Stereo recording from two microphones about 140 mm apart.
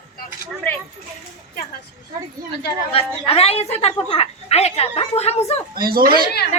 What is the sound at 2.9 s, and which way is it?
A woman's voice, 45° left (ahead or behind).